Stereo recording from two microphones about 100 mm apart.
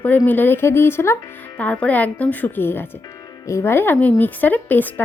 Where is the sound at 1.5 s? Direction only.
15° left (ahead or behind).